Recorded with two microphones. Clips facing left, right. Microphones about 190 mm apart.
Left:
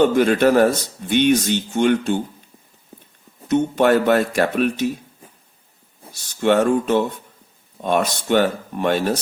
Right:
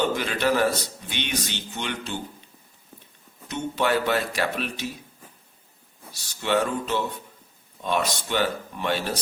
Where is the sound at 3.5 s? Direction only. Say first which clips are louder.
Left 9 dB; 50° left (ahead or behind).